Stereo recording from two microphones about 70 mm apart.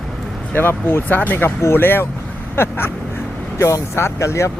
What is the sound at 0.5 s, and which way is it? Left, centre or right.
Speech, left.